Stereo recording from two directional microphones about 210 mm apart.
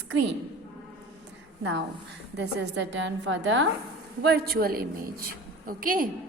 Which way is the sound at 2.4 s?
55° right (ahead or behind).